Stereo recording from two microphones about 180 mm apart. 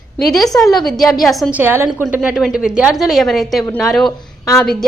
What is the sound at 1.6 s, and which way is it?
A woman's voice, 10° right (ahead or behind).